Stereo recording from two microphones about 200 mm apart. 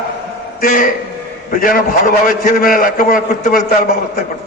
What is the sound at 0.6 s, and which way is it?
A man's voice, 45° left (ahead or behind).